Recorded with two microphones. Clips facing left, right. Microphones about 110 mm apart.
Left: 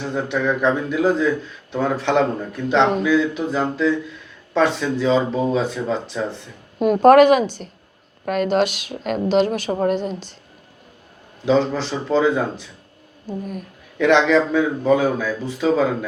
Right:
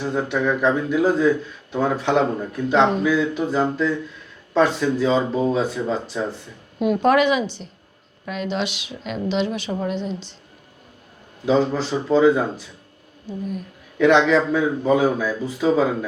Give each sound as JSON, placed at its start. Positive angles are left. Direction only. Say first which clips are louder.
{"t": 0.0, "sound": "speech", "louder": "even", "side_deg": -5}
{"t": 6.7, "sound": "a woman's voice", "louder": "left 6 dB", "side_deg": 45}
{"t": 11.4, "sound": "speech", "louder": "left 1 dB", "side_deg": -10}
{"t": 13.4, "sound": "a woman's voice", "louder": "right 2 dB", "side_deg": 50}
{"t": 14.0, "sound": "speech", "louder": "even", "side_deg": -5}